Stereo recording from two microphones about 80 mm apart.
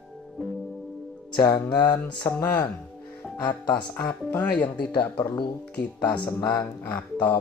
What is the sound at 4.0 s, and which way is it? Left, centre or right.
Speech, left.